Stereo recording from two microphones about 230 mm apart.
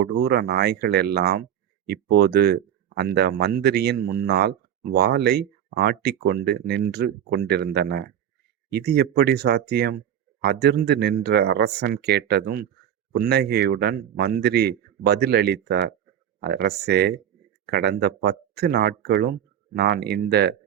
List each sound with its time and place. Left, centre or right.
0.0 s speech: right